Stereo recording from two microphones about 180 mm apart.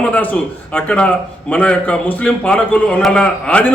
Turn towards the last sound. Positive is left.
turn(degrees=5)  # may be behind; listen again after turning